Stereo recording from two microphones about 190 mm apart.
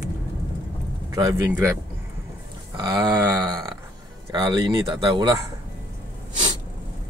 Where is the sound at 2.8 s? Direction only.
20° right (ahead or behind).